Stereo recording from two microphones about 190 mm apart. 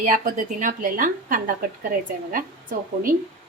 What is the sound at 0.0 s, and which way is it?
A woman's voice, 45° right (ahead or behind).